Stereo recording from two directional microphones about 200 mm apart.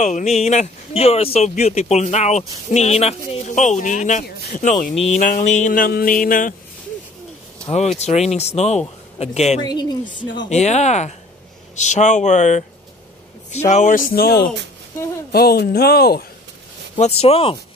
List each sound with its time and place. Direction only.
0.0 s speech: 35° left (ahead or behind)
7.6 s speech: 35° left (ahead or behind)
9.7 s speech: 20° left (ahead or behind)
10.5 s speech: 35° left (ahead or behind); by 16.3 s 50° left (ahead or behind)
16.9 s speech: 30° left (ahead or behind)